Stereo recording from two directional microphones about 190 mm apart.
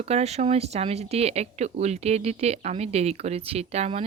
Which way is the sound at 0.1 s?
35° right (ahead or behind).